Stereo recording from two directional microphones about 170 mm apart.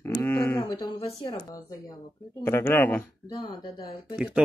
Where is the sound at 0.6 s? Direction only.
25° left (ahead or behind).